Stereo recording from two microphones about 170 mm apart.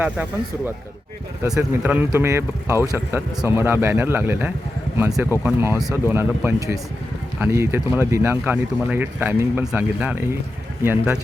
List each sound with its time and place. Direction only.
1.4 s speech: 15° right (ahead or behind)